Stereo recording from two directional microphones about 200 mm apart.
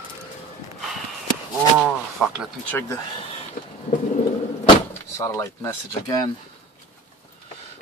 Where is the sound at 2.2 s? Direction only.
5° right (ahead or behind).